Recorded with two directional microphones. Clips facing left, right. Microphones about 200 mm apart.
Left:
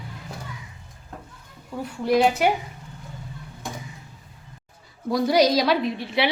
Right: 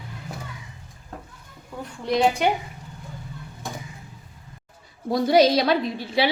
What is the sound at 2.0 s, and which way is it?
Speech, 5° left (ahead or behind).